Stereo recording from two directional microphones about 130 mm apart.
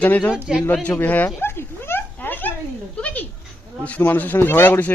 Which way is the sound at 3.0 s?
10° left (ahead or behind).